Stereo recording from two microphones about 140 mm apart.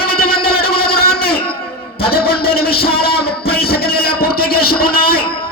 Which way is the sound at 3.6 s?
90° left.